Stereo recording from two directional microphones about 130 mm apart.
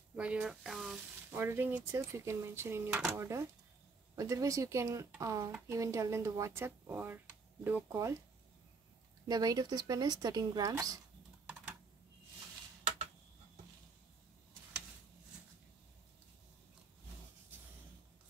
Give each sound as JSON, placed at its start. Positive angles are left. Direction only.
{"t": 0.1, "sound": "a sound", "side_deg": -10}
{"t": 1.3, "sound": "speech", "side_deg": -15}
{"t": 9.3, "sound": "speech", "side_deg": -30}